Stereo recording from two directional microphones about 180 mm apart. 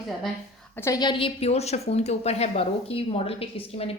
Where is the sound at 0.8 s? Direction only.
20° left (ahead or behind).